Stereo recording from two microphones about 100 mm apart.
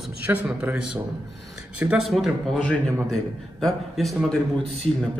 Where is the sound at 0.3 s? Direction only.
20° right (ahead or behind).